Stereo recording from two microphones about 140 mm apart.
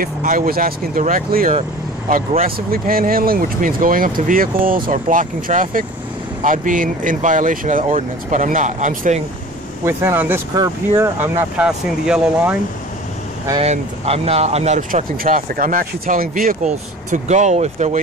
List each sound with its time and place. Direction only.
0.0 s speech: 85° right; by 9.2 s 60° right (ahead or behind)
9.8 s speech: 15° right (ahead or behind)
13.6 s speech: 45° right (ahead or behind)
14.8 s speech: 70° right (ahead or behind); by 18.0 s 55° right (ahead or behind)